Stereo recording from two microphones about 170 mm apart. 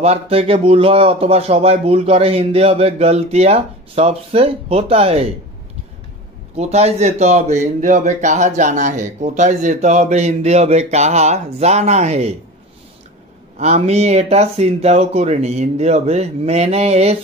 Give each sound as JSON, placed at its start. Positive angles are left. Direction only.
{"t": 0.0, "sound": "a man's voice", "side_deg": -35}
{"t": 6.5, "sound": "a man's voice", "side_deg": -40}
{"t": 13.6, "sound": "a man's voice", "side_deg": -40}